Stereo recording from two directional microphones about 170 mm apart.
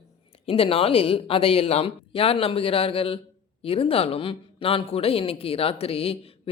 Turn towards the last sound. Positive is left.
turn(degrees=35)  # may be behind; listen again after turning